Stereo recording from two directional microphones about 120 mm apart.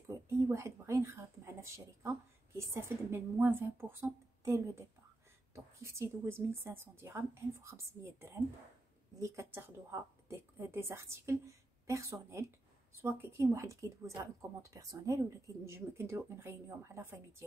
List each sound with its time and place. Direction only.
0.5 s speech: 25° right (ahead or behind)
2.0 s a sound: 25° right (ahead or behind)
5.5 s a woman's voice: 25° right (ahead or behind)